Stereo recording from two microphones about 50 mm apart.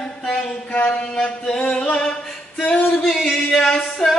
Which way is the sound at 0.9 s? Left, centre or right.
Left.